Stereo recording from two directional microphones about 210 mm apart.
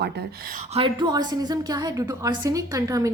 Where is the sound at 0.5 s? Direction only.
30° right (ahead or behind).